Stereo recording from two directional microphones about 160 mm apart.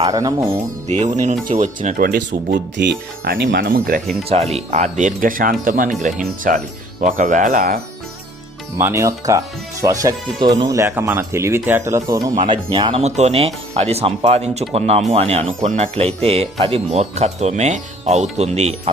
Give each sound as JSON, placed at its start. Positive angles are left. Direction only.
{"t": 0.0, "sound": "speech", "side_deg": -25}
{"t": 1.1, "sound": "speech", "side_deg": -45}
{"t": 4.3, "sound": "speech", "side_deg": -40}
{"t": 8.8, "sound": "speech", "side_deg": -20}
{"t": 13.0, "sound": "speech", "side_deg": -45}